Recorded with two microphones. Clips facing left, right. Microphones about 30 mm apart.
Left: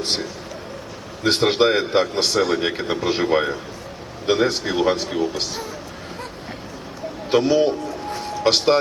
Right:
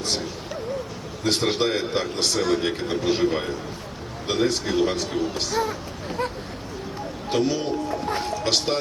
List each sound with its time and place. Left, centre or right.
1.2 s a man's voice: left
7.3 s a man's voice: left